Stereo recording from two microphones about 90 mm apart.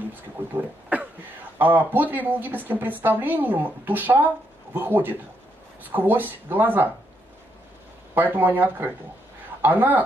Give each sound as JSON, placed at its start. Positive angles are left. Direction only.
{"t": 0.1, "sound": "a woman's voice", "side_deg": -20}
{"t": 8.1, "sound": "a woman's voice", "side_deg": -20}